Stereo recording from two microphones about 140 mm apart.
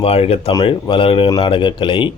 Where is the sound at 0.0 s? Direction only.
45° left (ahead or behind).